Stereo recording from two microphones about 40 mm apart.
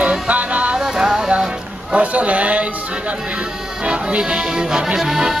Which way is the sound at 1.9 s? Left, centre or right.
Right.